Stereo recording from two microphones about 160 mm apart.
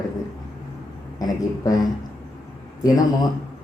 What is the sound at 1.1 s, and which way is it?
Speech, 20° left (ahead or behind).